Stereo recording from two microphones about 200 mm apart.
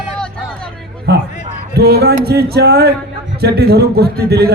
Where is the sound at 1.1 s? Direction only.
55° right (ahead or behind).